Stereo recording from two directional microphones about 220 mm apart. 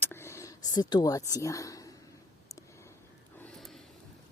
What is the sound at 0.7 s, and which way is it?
Speech, 20° left (ahead or behind).